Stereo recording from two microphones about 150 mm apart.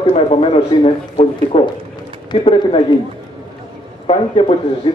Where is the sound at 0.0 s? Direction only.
40° left (ahead or behind).